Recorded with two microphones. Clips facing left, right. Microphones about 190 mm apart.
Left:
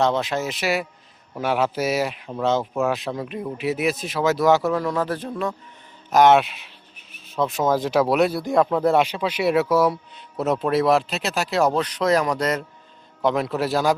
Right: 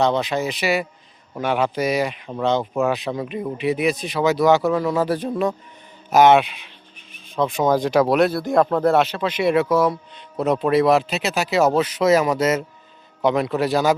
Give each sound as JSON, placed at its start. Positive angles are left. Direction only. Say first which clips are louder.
{"t": 0.0, "sound": "a man's voice", "louder": "right 2 dB", "side_deg": 0}
{"t": 6.1, "sound": "a man's voice", "louder": "right 2 dB", "side_deg": -5}